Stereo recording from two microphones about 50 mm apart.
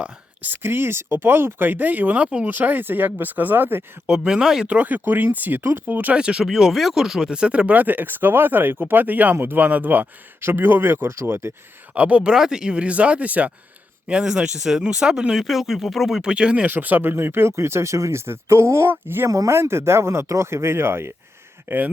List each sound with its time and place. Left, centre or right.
0.4 s speech: right
4.3 s speech: centre
4.6 s speech: right
5.9 s speech: right
6.1 s speech: centre
6.4 s speech: centre; by 10.1 s right
10.4 s speech: right
11.9 s speech: right
12.2 s speech: centre; by 13.5 s right
14.1 s speech: centre
16.3 s speech: right
16.6 s speech: right
19.0 s speech: right